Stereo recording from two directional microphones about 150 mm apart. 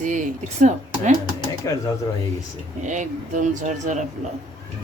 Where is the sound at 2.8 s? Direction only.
55° right (ahead or behind).